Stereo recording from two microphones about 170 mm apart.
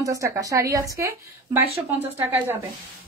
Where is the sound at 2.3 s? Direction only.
15° right (ahead or behind).